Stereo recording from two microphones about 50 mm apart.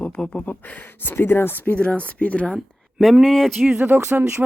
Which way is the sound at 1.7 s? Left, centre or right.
Left.